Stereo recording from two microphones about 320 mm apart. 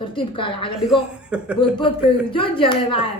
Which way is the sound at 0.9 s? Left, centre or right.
Centre.